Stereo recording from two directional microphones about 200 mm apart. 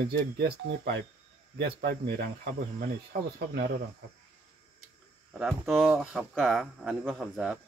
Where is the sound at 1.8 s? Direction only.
45° right (ahead or behind).